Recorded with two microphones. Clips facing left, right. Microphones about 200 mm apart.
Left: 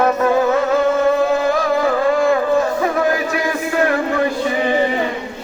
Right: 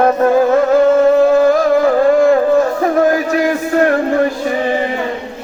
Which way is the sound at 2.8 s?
40° right (ahead or behind).